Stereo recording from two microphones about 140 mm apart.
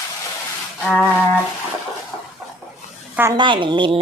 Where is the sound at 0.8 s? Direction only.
10° left (ahead or behind).